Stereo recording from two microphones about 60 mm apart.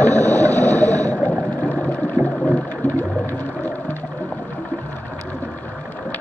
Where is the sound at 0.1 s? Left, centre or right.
Right.